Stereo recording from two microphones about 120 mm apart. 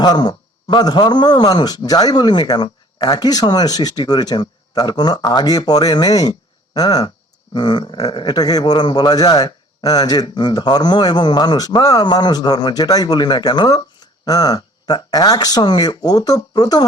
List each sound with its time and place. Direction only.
0.0 s speech: 35° left (ahead or behind)